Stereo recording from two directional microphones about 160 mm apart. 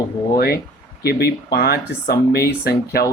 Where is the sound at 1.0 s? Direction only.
90° left.